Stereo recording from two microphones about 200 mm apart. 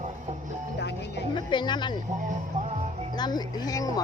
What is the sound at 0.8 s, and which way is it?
Speech, 60° left (ahead or behind).